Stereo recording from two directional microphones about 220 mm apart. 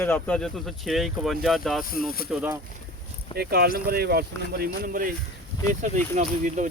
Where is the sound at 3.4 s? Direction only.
45° right (ahead or behind).